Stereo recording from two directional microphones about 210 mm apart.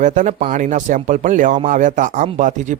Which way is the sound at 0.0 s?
35° right (ahead or behind).